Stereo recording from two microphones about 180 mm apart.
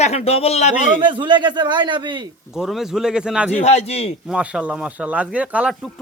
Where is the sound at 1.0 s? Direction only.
25° right (ahead or behind).